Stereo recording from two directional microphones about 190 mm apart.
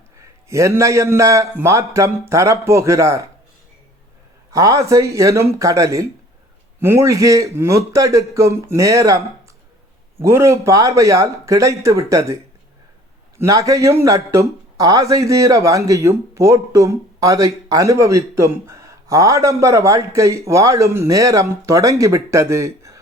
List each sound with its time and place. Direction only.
0.2 s a man's voice: 15° right (ahead or behind)
4.5 s speech: 15° right (ahead or behind)
13.4 s speech: 15° right (ahead or behind)